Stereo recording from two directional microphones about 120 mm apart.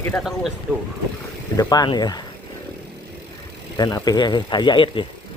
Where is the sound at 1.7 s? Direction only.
35° left (ahead or behind).